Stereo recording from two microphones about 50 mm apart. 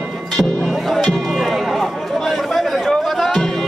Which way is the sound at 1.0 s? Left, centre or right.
Centre.